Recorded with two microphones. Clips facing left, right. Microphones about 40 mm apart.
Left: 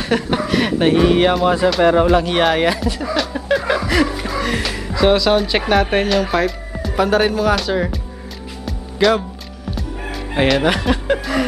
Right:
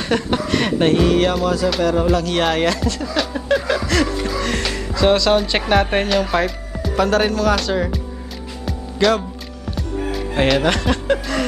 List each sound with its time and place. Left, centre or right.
0.1 s a man's voice: centre
3.2 s a sound: centre
3.6 s music: centre
7.1 s speech: centre
9.0 s speech: centre
9.9 s music: centre
10.6 s speech: centre